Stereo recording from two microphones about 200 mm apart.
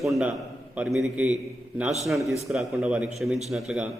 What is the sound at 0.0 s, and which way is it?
A man's voice, centre (ahead or behind).